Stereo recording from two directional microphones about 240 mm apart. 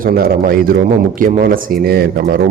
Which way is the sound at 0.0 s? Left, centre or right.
Right.